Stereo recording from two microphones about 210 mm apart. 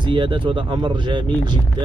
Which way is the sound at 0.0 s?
25° right (ahead or behind).